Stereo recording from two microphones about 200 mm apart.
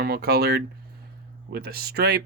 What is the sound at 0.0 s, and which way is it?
Speech, 50° right (ahead or behind).